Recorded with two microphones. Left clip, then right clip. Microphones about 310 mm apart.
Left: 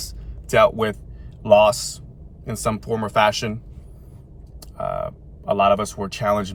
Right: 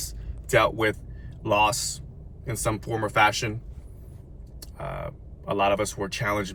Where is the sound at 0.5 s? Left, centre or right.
Centre.